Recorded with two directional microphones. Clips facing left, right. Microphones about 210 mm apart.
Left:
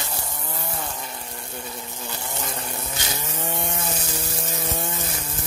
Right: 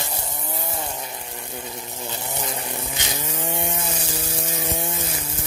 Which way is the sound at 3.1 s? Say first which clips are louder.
Right 3 dB; 10° right (ahead or behind).